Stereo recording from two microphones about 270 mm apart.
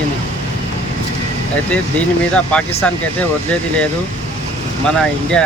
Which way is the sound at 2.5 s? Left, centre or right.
Centre.